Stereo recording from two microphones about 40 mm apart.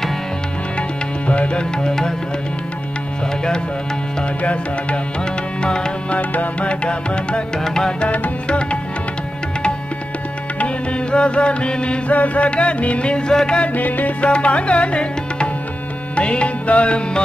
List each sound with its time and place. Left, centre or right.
0.7 s music: left; by 2.1 s centre
4.4 s music: left
5.6 s music: centre
6.1 s music: left
6.7 s music: left
7.6 s music: centre
8.0 s music: left
8.5 s music: left
10.6 s music: left
12.1 s music: left
13.3 s music: centre
13.7 s music: left
14.3 s music: left